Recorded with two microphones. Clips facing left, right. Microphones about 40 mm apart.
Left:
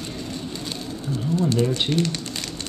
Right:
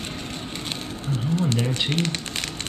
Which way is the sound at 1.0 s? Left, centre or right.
Right.